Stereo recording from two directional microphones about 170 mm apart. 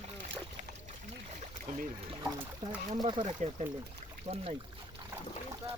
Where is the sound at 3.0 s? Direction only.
30° right (ahead or behind).